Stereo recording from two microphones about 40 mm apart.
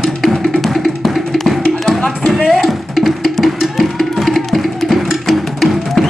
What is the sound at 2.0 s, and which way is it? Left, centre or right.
Music, centre.